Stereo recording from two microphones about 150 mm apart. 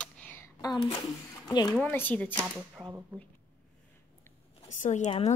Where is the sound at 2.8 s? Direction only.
10° right (ahead or behind).